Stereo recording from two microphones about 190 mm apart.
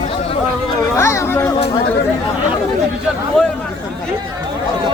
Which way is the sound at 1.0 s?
15° left (ahead or behind).